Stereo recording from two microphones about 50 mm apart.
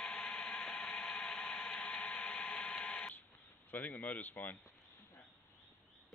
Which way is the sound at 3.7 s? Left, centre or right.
Left.